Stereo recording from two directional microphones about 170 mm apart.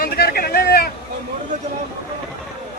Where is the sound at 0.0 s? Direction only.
65° left (ahead or behind).